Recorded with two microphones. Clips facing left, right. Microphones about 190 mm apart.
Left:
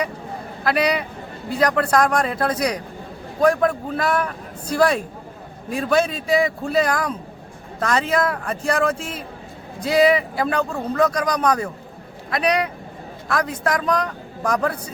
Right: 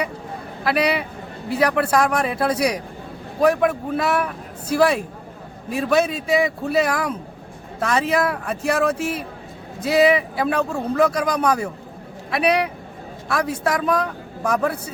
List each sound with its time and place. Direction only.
0.6 s a man's voice: 5° right (ahead or behind)